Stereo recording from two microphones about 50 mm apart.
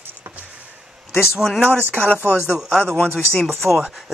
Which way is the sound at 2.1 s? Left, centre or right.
Left.